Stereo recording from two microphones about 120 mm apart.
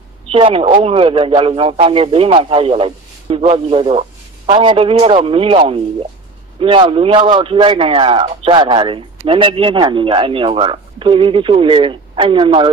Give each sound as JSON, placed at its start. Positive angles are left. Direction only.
{"t": 0.3, "sound": "a man's voice", "side_deg": -50}